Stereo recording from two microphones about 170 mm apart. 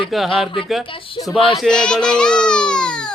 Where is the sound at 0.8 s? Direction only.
30° left (ahead or behind).